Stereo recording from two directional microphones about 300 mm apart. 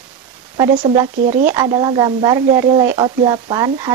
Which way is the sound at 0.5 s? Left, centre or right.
Centre.